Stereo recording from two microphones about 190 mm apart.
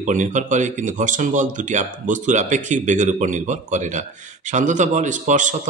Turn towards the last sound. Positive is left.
turn(degrees=-40)  # may be behind; listen again after turning